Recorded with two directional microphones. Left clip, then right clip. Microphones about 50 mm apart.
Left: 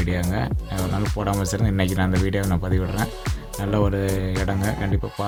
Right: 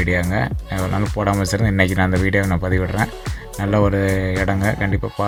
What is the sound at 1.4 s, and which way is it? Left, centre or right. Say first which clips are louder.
Speech: right 7 dB; right.